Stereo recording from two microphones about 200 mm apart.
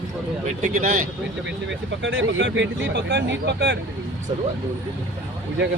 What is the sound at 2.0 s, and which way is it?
Speech, 75° right (ahead or behind).